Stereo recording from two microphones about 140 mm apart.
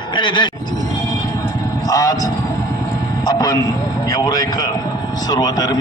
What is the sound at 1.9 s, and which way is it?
Speech, 25° left (ahead or behind).